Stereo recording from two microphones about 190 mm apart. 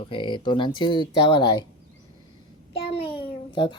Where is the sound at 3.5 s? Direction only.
25° left (ahead or behind).